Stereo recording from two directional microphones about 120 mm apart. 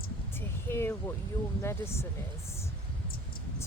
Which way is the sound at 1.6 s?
20° left (ahead or behind).